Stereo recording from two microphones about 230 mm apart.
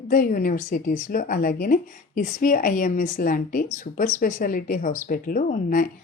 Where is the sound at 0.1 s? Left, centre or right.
Left.